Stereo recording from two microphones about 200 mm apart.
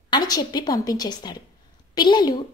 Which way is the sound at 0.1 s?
20° left (ahead or behind).